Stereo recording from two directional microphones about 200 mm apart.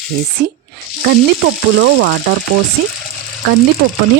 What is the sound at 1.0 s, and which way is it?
Speech, 60° right (ahead or behind).